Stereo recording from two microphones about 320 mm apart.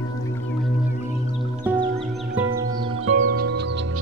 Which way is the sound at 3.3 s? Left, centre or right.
Right.